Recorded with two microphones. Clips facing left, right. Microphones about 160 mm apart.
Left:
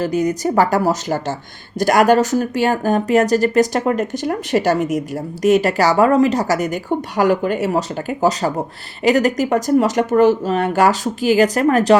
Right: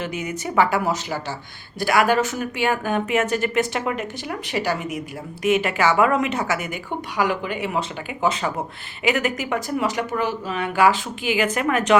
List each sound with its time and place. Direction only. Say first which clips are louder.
0.0 s speech: left 10 dB; 40° left (ahead or behind)